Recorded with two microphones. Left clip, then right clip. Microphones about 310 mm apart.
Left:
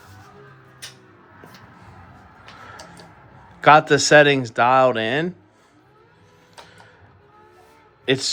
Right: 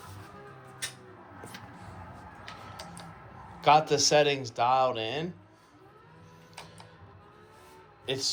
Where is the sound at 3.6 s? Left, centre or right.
Left.